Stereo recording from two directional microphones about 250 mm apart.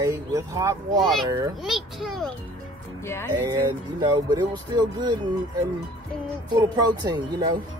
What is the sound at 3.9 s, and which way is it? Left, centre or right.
Speech, centre.